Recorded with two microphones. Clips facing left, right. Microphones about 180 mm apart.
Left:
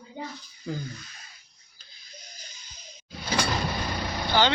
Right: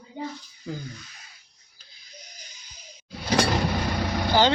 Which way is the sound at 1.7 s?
10° right (ahead or behind).